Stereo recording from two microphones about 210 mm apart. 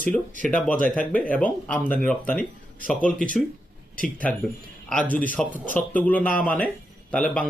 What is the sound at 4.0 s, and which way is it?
Speech, 5° left (ahead or behind).